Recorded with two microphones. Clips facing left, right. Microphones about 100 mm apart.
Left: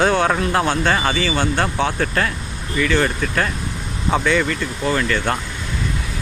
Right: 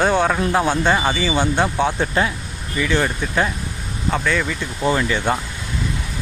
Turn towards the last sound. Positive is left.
turn(degrees=-10)  # may be behind; listen again after turning